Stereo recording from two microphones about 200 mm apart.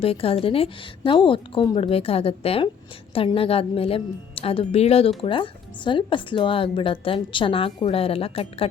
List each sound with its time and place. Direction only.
0.0 s a woman's voice: 30° left (ahead or behind)